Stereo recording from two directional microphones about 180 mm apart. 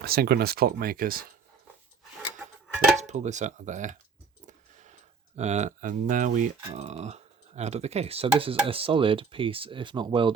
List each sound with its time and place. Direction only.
0.0 s speech: 60° right (ahead or behind)
3.0 s speech: 40° right (ahead or behind)
4.4 s a sound: 40° right (ahead or behind)
5.4 s speech: 40° right (ahead or behind)